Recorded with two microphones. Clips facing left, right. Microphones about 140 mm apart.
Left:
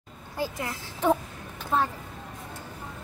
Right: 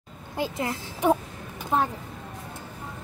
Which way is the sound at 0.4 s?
25° right (ahead or behind).